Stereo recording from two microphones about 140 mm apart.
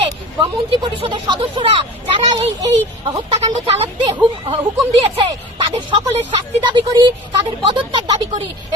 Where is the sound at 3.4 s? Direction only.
50° right (ahead or behind).